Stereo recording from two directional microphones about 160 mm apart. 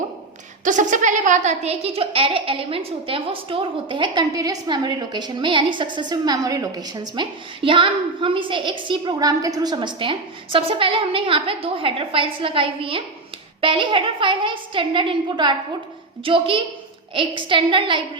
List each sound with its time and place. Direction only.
0.6 s a woman's voice: 50° right (ahead or behind); by 18.0 s 30° right (ahead or behind)